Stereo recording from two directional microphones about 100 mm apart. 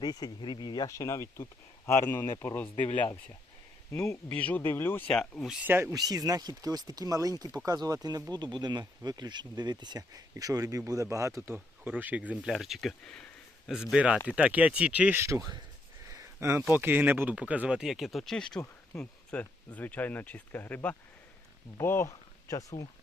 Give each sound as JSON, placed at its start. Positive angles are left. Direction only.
{"t": 0.0, "sound": "speech", "side_deg": 45}
{"t": 4.1, "sound": "speech", "side_deg": 15}
{"t": 5.0, "sound": "speech", "side_deg": 5}
{"t": 5.6, "sound": "speech", "side_deg": -20}
{"t": 5.9, "sound": "speech", "side_deg": -40}
{"t": 12.5, "sound": "speech", "side_deg": 0}
{"t": 13.7, "sound": "speech", "side_deg": -5}
{"t": 15.2, "sound": "speech", "side_deg": -35}